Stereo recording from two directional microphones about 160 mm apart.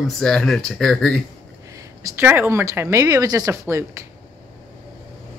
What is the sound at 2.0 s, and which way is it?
Speech, 15° right (ahead or behind).